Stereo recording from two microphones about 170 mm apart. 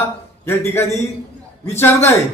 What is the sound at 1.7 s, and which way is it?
Speech, 15° left (ahead or behind).